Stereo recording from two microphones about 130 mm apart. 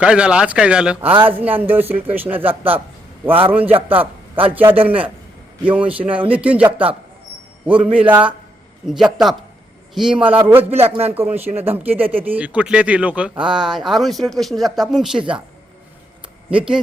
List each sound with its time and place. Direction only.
0.0 s speech: 5° right (ahead or behind)
7.9 s speech: 10° right (ahead or behind)
10.8 s a man's voice: 50° right (ahead or behind)
11.1 s speech: 15° right (ahead or behind)
16.5 s speech: 5° right (ahead or behind)